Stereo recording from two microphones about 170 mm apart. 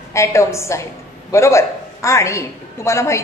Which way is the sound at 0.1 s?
15° left (ahead or behind).